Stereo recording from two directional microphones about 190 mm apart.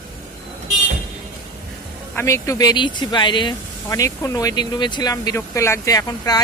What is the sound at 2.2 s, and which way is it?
A woman's voice, 15° left (ahead or behind).